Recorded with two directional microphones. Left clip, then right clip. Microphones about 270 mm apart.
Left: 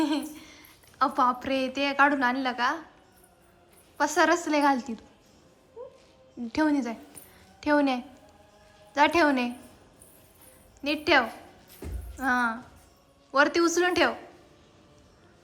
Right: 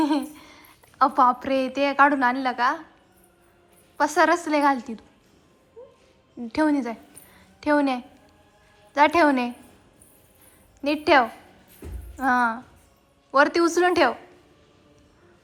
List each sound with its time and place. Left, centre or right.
0.0 s a woman's voice: centre
3.9 s a woman's voice: centre
6.5 s a woman's voice: centre
10.8 s a woman's voice: centre